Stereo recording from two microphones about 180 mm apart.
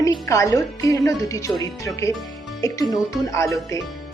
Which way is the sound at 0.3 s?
15° left (ahead or behind).